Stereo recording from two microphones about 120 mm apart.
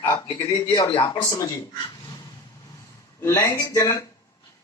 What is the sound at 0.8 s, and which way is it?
Speech, 40° left (ahead or behind).